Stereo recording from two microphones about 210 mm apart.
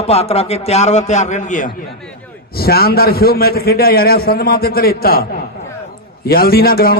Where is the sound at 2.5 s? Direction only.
45° left (ahead or behind).